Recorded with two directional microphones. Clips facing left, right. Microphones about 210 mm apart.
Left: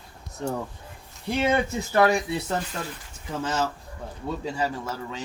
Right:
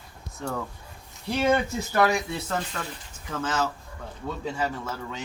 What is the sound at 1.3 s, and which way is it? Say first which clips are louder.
Speech: even; 20° left (ahead or behind).